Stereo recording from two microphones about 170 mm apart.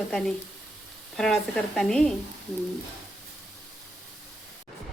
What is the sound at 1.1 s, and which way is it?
Speech, centre (ahead or behind).